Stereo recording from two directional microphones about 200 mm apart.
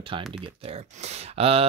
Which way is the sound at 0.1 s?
25° right (ahead or behind).